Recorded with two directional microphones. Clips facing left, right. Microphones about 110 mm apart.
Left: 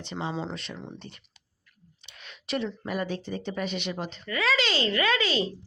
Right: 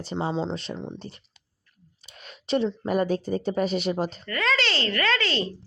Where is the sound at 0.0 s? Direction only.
40° right (ahead or behind).